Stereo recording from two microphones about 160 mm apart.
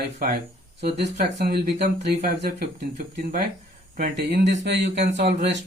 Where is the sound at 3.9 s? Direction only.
80° right.